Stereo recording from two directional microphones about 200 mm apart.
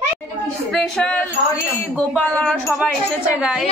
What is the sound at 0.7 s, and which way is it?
Speech, 5° left (ahead or behind).